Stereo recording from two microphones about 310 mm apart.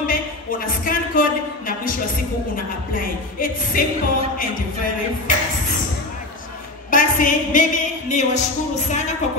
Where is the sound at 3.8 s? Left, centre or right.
Left.